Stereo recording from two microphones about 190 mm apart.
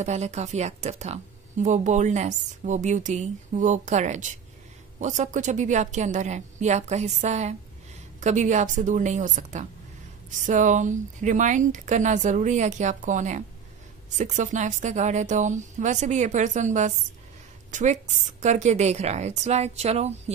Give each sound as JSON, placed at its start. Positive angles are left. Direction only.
{"t": 0.0, "sound": "speech", "side_deg": -35}